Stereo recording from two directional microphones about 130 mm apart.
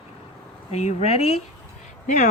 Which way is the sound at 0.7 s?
60° left (ahead or behind).